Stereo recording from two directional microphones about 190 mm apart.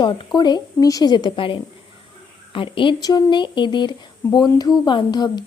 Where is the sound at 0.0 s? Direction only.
25° left (ahead or behind).